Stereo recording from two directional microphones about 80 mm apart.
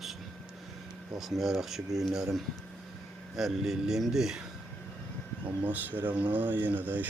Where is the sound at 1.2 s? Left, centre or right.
Centre.